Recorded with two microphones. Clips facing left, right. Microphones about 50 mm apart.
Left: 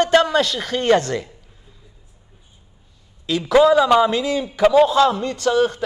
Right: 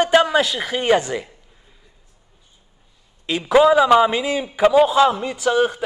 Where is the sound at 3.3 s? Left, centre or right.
Right.